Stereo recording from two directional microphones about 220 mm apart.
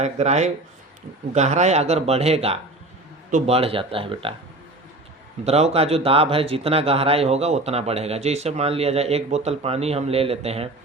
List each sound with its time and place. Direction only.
0.0 s a man's voice: 30° right (ahead or behind)
5.5 s a man's voice: 30° right (ahead or behind)